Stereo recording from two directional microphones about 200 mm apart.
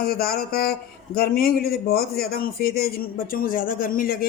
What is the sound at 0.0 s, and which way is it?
A man's voice, 50° left (ahead or behind).